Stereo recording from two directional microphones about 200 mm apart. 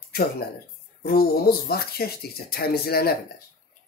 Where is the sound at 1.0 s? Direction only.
50° left (ahead or behind).